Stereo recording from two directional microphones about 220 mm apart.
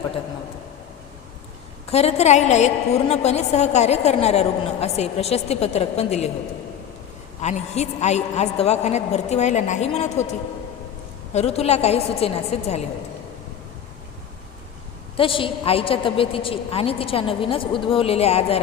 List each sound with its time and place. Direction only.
1.9 s a woman's voice: 30° left (ahead or behind)
7.4 s a woman's voice: 30° left (ahead or behind)
11.3 s a woman's voice: 30° left (ahead or behind)
15.1 s a woman's voice: 25° left (ahead or behind)